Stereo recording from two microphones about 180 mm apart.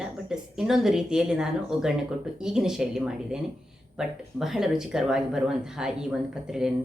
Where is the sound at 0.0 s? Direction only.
5° right (ahead or behind).